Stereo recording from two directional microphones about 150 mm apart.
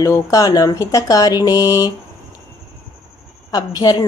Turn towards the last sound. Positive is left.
turn(degrees=25)  # may be behind; listen again after turning